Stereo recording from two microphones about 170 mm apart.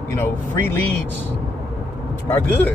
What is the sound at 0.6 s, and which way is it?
Speech, 15° left (ahead or behind).